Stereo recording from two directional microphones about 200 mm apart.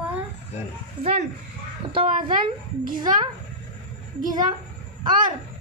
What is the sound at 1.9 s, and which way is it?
Speech, 25° right (ahead or behind).